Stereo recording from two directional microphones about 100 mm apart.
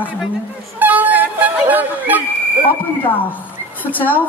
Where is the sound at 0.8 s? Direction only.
15° right (ahead or behind).